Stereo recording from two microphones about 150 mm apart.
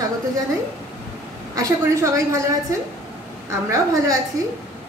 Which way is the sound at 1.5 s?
20° right (ahead or behind).